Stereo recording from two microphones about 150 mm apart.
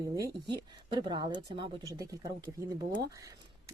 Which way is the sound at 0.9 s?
30° right (ahead or behind).